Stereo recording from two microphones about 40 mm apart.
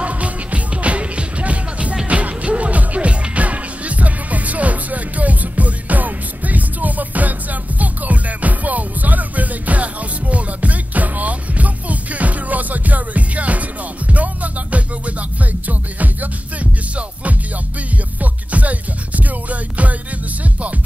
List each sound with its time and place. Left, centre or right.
0.0 s music: right
18.2 s music: right